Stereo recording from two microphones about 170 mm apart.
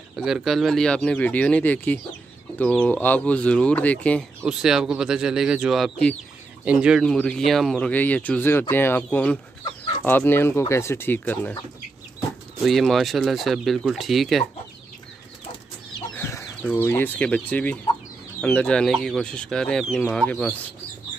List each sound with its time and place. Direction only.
0.1 s speech: centre (ahead or behind)
4.4 s speech: 5° right (ahead or behind); by 11.5 s 10° left (ahead or behind)
12.6 s speech: centre (ahead or behind)
16.2 s chicken: 15° left (ahead or behind)
16.6 s speech: 10° left (ahead or behind)